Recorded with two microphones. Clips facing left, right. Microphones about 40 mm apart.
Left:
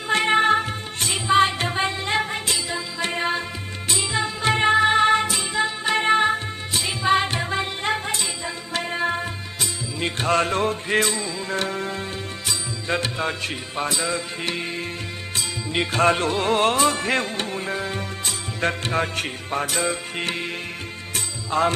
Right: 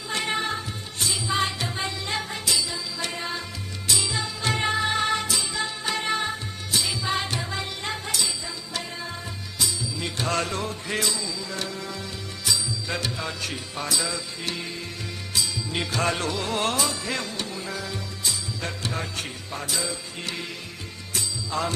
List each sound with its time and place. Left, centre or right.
0.1 s music: left